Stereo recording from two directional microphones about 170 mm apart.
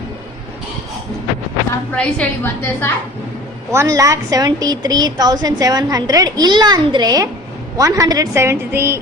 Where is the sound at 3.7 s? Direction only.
20° right (ahead or behind).